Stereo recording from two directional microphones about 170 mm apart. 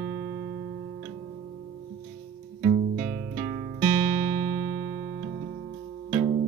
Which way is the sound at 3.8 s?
15° right (ahead or behind).